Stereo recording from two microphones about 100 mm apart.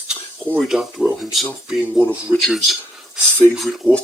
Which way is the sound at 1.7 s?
15° right (ahead or behind).